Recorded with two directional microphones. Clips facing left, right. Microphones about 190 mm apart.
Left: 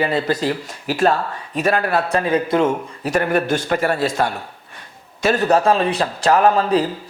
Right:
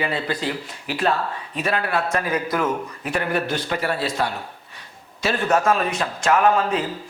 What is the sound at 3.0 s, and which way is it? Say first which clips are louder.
A man's voice: left 6 dB; 45° left (ahead or behind).